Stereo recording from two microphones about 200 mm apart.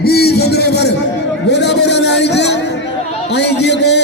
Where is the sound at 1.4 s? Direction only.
60° left (ahead or behind).